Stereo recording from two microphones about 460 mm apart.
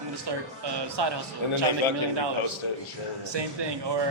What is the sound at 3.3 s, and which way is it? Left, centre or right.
Speech, right.